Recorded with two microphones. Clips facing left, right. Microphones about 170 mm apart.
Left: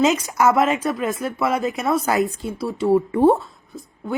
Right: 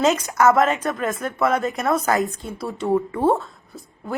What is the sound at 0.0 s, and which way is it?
Speech, centre (ahead or behind).